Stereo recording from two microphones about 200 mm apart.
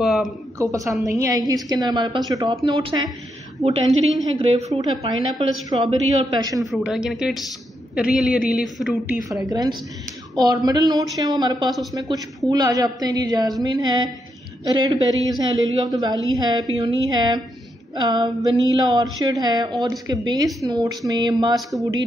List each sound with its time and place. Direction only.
0.0 s a sound: centre (ahead or behind)
0.6 s a woman's voice: 15° right (ahead or behind)
4.4 s a woman's voice: 30° right (ahead or behind)
6.6 s speech: centre (ahead or behind)
9.5 s a woman's voice: 20° right (ahead or behind)
21.5 s speech: centre (ahead or behind)